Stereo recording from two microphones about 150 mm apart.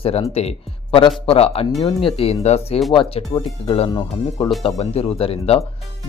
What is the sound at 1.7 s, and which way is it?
Speech, 30° left (ahead or behind).